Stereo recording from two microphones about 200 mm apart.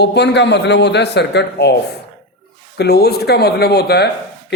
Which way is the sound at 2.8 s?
55° left (ahead or behind).